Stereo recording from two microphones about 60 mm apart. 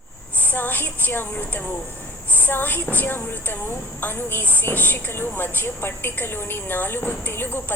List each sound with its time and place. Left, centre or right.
0.4 s a woman's voice: left